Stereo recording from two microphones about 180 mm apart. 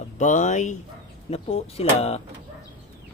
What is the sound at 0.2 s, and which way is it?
Speech, 45° left (ahead or behind).